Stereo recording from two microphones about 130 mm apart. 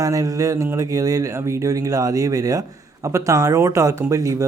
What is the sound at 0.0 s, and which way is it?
Speech, 25° right (ahead or behind).